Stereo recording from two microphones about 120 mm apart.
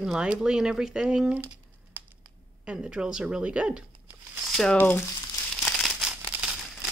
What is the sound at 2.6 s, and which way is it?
Speech, 10° right (ahead or behind).